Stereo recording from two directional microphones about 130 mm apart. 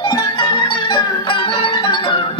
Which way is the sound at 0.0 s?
35° left (ahead or behind).